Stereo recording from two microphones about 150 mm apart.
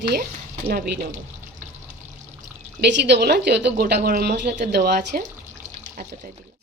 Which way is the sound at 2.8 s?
60° right (ahead or behind).